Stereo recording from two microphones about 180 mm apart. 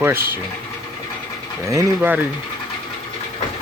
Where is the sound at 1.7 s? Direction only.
15° right (ahead or behind).